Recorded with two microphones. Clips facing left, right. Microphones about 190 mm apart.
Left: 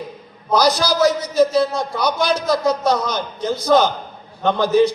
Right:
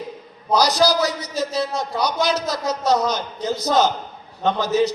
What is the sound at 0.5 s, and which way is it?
A man's voice, 40° right (ahead or behind).